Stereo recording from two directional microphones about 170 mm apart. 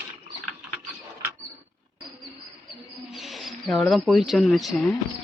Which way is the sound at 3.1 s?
Centre (ahead or behind).